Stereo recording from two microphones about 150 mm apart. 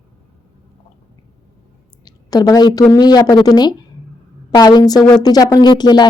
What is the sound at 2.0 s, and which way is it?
A woman's voice, 25° left (ahead or behind).